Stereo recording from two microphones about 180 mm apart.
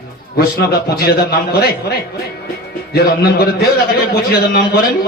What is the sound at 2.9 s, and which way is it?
A man's voice, 60° left (ahead or behind).